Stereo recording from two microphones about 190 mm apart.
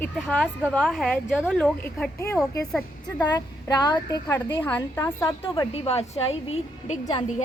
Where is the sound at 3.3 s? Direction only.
20° left (ahead or behind).